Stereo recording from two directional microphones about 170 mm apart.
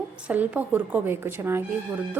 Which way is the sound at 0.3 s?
10° right (ahead or behind).